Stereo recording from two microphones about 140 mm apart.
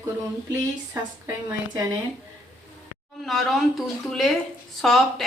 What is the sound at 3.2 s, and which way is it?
Speech, centre (ahead or behind).